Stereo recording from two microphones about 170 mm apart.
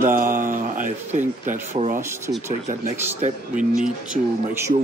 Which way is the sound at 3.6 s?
5° right (ahead or behind).